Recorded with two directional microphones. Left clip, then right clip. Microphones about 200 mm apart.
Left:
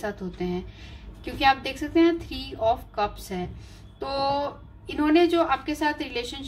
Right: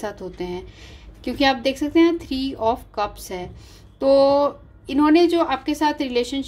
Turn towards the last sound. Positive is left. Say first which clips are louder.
# right 6 dB
turn(degrees=-45)  # may be behind; listen again after turning